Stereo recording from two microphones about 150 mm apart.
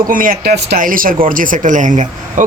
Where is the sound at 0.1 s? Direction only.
65° right (ahead or behind).